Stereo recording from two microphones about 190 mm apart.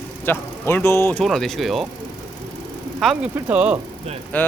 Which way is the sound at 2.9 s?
5° right (ahead or behind).